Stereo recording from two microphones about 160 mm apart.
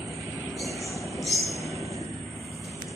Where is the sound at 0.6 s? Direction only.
Centre (ahead or behind).